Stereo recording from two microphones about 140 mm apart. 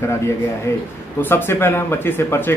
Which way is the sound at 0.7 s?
20° left (ahead or behind).